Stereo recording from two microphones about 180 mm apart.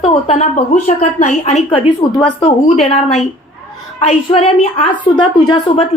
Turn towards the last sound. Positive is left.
turn(degrees=25)  # may be behind; listen again after turning